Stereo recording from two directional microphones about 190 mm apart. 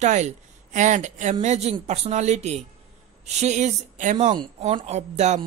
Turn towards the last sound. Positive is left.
turn(degrees=-35)  # may be behind; listen again after turning